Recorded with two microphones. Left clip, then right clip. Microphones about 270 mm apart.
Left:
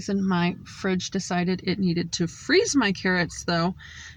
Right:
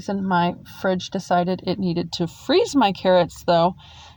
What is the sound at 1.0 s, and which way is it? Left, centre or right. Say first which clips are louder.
Speech: right 7 dB; right.